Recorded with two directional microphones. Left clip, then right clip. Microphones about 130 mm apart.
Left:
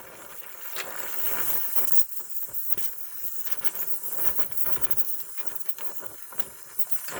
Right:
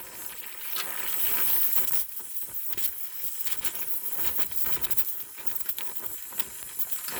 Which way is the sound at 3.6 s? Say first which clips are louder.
Right 1 dB; 25° right (ahead or behind).